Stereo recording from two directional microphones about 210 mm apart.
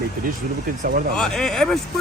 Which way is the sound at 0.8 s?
40° right (ahead or behind).